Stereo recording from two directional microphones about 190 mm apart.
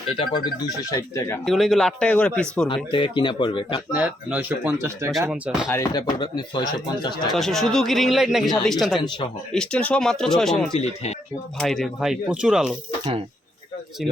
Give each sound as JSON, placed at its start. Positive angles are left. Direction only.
{"t": 0.9, "sound": "speech", "side_deg": 15}
{"t": 1.5, "sound": "speech", "side_deg": 0}
{"t": 2.6, "sound": "speech", "side_deg": 25}
{"t": 3.9, "sound": "speech", "side_deg": -10}
{"t": 5.3, "sound": "speech", "side_deg": -5}
{"t": 5.6, "sound": "speech", "side_deg": 15}
{"t": 7.3, "sound": "speech", "side_deg": 0}
{"t": 9.0, "sound": "speech", "side_deg": 25}
{"t": 9.5, "sound": "speech", "side_deg": 5}